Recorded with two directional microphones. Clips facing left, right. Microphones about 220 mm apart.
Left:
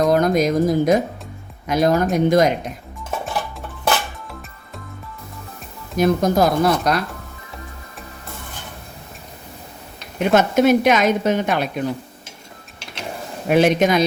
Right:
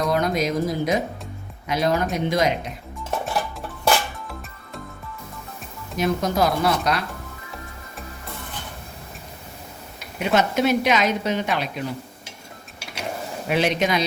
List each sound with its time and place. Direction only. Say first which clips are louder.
0.1 s a woman's voice: left 6 dB; 45° left (ahead or behind)
3.1 s music: even; centre (ahead or behind)
6.0 s a woman's voice: left 5 dB; 45° left (ahead or behind)
10.3 s a woman's voice: left 5 dB; 50° left (ahead or behind)
12.8 s a sound: even; 10° right (ahead or behind)
13.5 s a woman's voice: left 6 dB; 50° left (ahead or behind)